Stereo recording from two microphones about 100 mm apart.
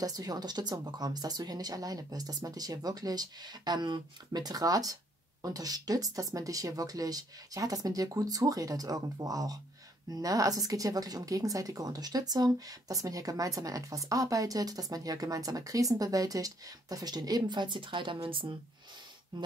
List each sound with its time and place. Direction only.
0.0 s speech: 40° right (ahead or behind)